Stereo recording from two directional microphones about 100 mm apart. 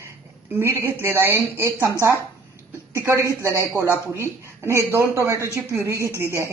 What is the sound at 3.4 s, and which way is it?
Speech, 25° right (ahead or behind).